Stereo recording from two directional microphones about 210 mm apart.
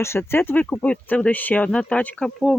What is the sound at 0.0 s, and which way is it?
Speech, 10° left (ahead or behind).